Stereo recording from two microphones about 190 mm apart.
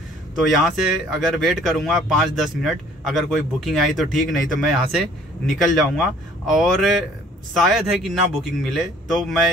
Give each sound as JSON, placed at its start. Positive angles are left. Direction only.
{"t": 0.5, "sound": "speech", "side_deg": 0}